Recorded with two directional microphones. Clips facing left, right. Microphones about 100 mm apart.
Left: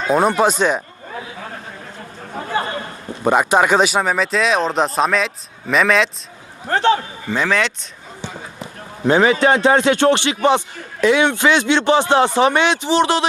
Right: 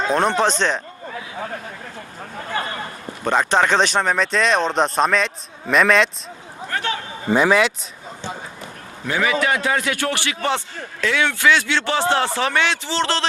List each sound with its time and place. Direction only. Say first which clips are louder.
0.1 s speech: left 5 dB; 10° left (ahead or behind)
3.2 s speech: left 3 dB; 10° left (ahead or behind)
6.7 s a sound: left 10 dB; 30° left (ahead or behind)
7.3 s speech: right 3 dB; 15° right (ahead or behind)
9.0 s speech: left 7 dB; 30° left (ahead or behind)